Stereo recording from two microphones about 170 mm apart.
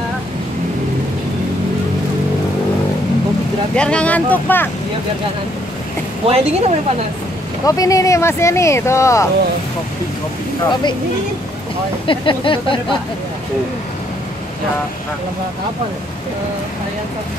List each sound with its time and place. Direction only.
3.7 s speech: 5° left (ahead or behind)
6.2 s speech: 35° right (ahead or behind)
7.6 s speech: 20° left (ahead or behind)
10.7 s speech: 25° left (ahead or behind)
12.1 s speech: 30° left (ahead or behind)